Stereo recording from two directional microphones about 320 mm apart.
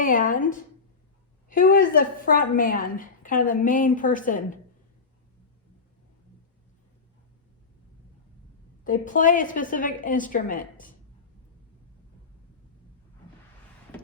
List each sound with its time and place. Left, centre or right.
0.0 s a woman's voice: left
1.5 s a woman's voice: left
8.8 s a woman's voice: left